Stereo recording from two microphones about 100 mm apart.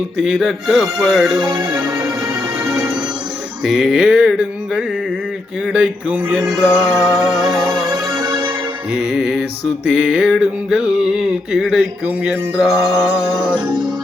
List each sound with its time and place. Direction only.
0.3 s music: centre (ahead or behind)
2.2 s music: 25° right (ahead or behind)
3.6 s music: centre (ahead or behind)
5.7 s a sound: 15° right (ahead or behind)
6.4 s music: 5° right (ahead or behind)
7.9 s music: 40° right (ahead or behind)
8.9 s music: centre (ahead or behind)
9.9 s a sound: centre (ahead or behind)
11.5 s music: centre (ahead or behind)